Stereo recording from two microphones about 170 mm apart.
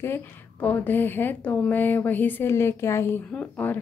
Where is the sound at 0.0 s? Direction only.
10° left (ahead or behind).